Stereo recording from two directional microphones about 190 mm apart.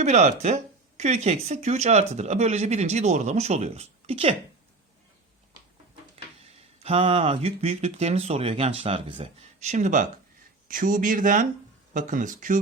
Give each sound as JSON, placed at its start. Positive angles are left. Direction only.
{"t": 0.0, "sound": "speech", "side_deg": -35}
{"t": 6.7, "sound": "speech", "side_deg": -30}